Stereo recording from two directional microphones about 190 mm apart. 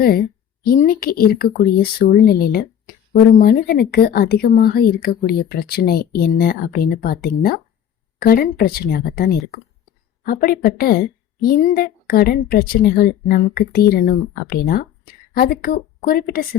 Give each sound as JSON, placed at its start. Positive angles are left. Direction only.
{"t": 0.0, "sound": "speech", "side_deg": 55}